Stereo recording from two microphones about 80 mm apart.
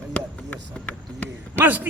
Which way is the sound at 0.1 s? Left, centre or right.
Centre.